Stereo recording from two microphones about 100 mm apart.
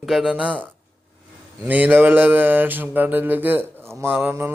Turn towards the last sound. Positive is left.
turn(degrees=-20)  # may be behind; listen again after turning